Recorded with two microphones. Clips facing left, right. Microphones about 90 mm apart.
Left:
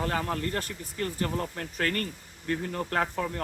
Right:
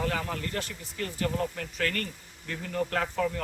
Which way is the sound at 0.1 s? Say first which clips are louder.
Left 3 dB; 35° left (ahead or behind).